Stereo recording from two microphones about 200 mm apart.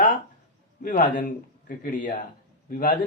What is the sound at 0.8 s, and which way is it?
Speech, 45° left (ahead or behind).